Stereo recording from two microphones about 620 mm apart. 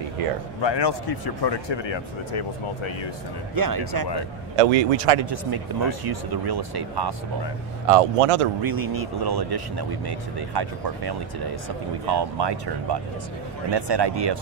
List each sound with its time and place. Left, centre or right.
0.6 s speech: left
3.5 s speech: right
4.6 s speech: right
5.3 s speech: right
7.9 s speech: right
8.6 s speech: right